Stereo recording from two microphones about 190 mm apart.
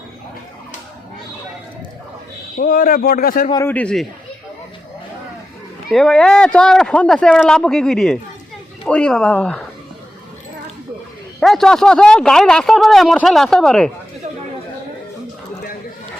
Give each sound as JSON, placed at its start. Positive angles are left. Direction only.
{"t": 2.6, "sound": "speech", "side_deg": 45}
{"t": 3.5, "sound": "speech", "side_deg": 10}
{"t": 5.9, "sound": "a man's voice", "side_deg": 5}
{"t": 11.3, "sound": "a man's voice", "side_deg": 0}